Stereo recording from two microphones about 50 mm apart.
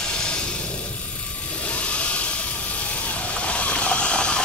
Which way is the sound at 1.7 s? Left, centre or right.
Left.